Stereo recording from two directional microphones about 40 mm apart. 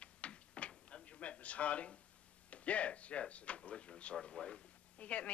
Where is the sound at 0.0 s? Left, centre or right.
Left.